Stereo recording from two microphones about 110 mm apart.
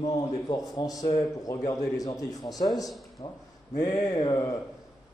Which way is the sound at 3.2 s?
45° left (ahead or behind).